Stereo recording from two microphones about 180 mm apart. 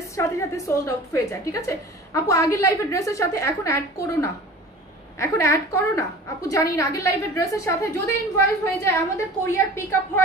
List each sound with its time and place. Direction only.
0.1 s a woman's voice: 15° left (ahead or behind)